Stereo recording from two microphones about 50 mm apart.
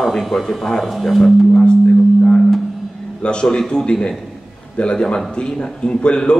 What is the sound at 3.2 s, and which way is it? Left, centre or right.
A man's voice, centre.